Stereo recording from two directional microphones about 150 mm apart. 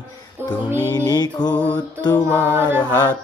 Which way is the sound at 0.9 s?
25° left (ahead or behind).